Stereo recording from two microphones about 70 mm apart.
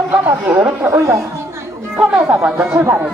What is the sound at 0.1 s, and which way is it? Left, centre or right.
Speech, right.